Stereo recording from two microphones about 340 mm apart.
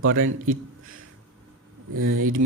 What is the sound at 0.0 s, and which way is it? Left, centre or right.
Speech, right.